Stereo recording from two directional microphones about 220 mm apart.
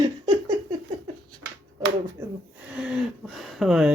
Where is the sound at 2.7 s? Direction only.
5° right (ahead or behind).